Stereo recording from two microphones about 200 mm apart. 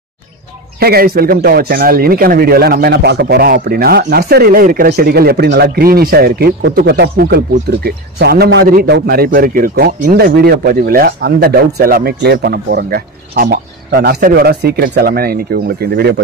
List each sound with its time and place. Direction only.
0.7 s a man's voice: 50° right (ahead or behind)